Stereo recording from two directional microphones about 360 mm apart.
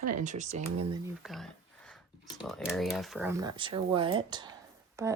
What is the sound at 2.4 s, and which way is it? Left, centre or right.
Speech, centre.